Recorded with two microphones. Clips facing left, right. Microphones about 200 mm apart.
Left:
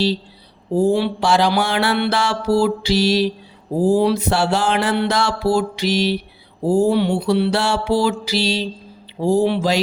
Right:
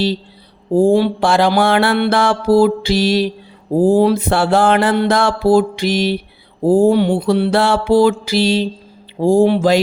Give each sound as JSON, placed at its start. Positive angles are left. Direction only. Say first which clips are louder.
{"t": 0.7, "sound": "music", "louder": "right 5 dB", "side_deg": -50}